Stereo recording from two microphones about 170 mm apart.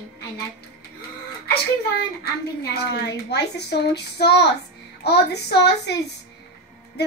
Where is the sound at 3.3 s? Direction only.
80° left.